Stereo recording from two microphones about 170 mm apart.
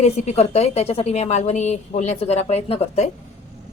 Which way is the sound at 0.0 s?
40° left (ahead or behind).